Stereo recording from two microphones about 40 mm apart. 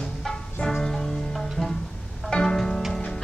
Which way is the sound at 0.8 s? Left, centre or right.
Centre.